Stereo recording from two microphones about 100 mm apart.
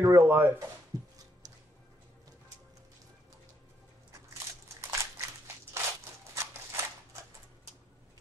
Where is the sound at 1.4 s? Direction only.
40° right (ahead or behind).